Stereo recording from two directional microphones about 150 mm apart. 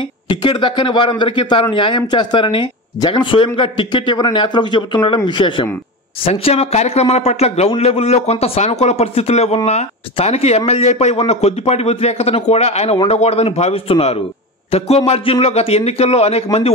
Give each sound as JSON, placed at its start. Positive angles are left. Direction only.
{"t": 0.3, "sound": "a man's voice", "side_deg": 30}